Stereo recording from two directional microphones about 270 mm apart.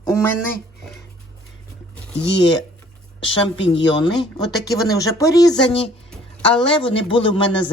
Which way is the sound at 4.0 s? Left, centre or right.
Centre.